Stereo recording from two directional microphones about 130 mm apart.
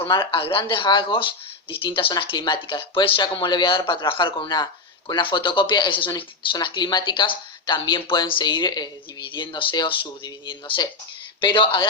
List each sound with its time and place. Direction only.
0.0 s speech: 40° left (ahead or behind)